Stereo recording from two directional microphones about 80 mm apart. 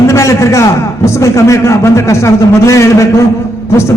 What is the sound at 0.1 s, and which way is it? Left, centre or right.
A man's voice, left.